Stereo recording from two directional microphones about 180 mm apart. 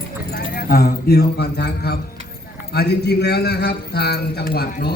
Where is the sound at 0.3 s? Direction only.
55° left (ahead or behind).